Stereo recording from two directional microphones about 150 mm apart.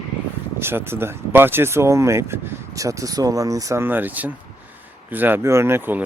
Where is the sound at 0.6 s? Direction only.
15° right (ahead or behind).